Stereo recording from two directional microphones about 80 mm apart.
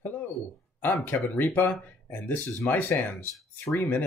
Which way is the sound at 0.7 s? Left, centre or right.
Left.